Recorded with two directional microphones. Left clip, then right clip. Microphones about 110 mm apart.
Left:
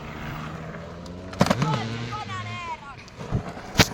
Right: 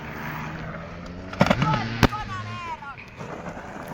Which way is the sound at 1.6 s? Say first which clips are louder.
Right 3 dB; 25° left (ahead or behind).